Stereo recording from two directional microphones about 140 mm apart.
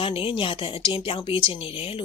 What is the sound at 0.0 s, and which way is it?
A woman's voice, 40° left (ahead or behind).